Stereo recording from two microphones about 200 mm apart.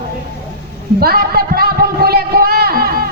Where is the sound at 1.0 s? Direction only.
50° right (ahead or behind).